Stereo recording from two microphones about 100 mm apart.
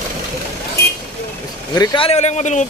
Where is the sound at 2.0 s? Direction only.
90° left.